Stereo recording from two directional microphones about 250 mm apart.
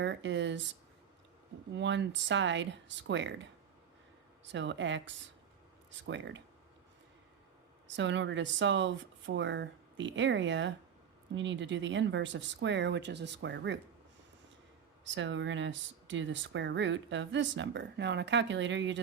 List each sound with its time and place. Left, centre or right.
0.0 s speech: right
1.7 s speech: right
4.5 s speech: right
7.9 s speech: right
15.0 s speech: right